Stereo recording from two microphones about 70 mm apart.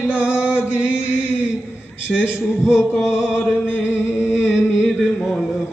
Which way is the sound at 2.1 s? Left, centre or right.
Centre.